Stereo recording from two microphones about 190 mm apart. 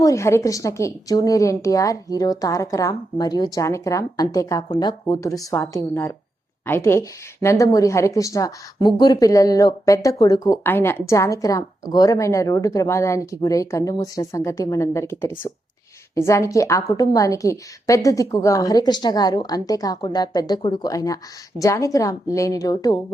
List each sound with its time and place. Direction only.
0.0 s a woman's voice: 15° left (ahead or behind)
16.1 s a woman's voice: 15° left (ahead or behind)